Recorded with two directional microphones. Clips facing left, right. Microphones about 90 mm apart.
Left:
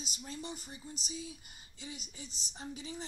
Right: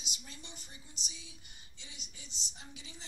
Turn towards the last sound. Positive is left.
turn(degrees=40)  # may be behind; listen again after turning